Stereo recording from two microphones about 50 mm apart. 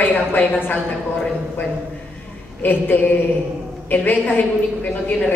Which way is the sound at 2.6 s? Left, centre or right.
Left.